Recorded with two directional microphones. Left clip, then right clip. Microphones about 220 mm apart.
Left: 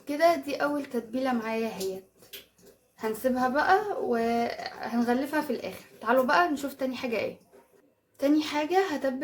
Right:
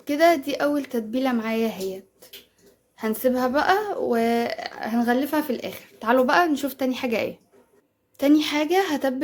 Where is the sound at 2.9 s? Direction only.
40° right (ahead or behind).